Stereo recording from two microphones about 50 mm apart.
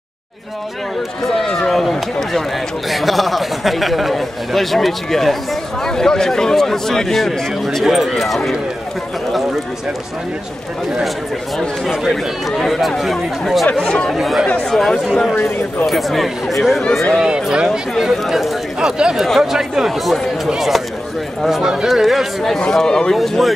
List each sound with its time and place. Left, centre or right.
1.2 s a man's voice: centre
7.8 s a man's voice: centre
9.3 s clip-clop: centre
11.8 s a man's voice: centre
13.7 s a man's voice: centre
14.1 s a man's voice: centre
17.2 s speech: centre
18.1 s a man's voice: centre
18.8 s speech: centre
19.1 s a man's voice: centre
19.4 s a man's voice: centre
22.6 s a man's voice: centre